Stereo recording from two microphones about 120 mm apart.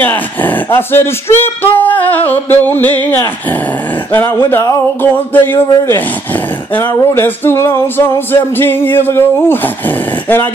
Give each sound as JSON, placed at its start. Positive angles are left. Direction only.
{"t": 0.0, "sound": "speech", "side_deg": 15}
{"t": 4.5, "sound": "speech", "side_deg": 20}
{"t": 7.2, "sound": "music", "side_deg": 20}